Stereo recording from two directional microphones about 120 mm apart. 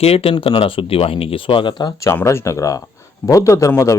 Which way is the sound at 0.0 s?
55° left (ahead or behind).